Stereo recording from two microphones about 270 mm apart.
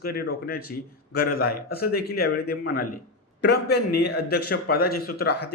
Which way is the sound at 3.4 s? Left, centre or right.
Left.